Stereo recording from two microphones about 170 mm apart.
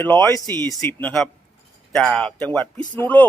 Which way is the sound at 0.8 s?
10° left (ahead or behind).